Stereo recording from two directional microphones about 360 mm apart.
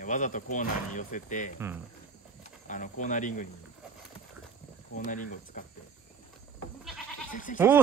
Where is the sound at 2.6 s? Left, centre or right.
Left.